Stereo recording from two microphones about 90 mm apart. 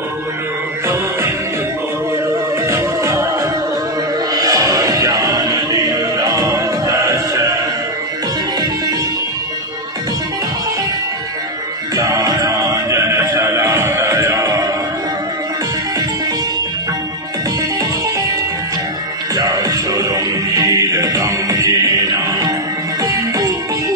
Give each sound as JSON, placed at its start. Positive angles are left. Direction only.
{"t": 2.6, "sound": "music", "side_deg": -35}
{"t": 4.3, "sound": "music", "side_deg": -40}
{"t": 11.9, "sound": "music", "side_deg": -40}
{"t": 19.3, "sound": "music", "side_deg": -45}